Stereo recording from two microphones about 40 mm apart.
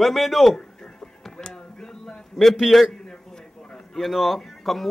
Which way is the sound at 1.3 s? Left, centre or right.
Left.